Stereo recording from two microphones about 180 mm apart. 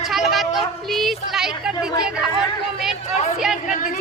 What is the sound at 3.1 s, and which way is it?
Chatter, 35° left (ahead or behind).